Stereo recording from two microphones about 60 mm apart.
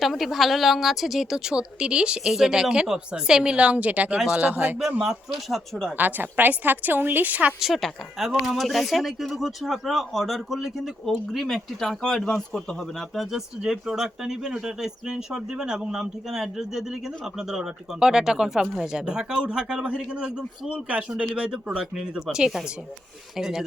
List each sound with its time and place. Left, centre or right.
0.0 s a woman's voice: centre; by 4.8 s right
5.0 s speech: centre
6.0 s a woman's voice: right
7.6 s speech: centre
13.6 s a woman's voice: centre